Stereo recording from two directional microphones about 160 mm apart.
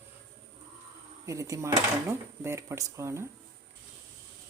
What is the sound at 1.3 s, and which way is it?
Speech, 20° right (ahead or behind).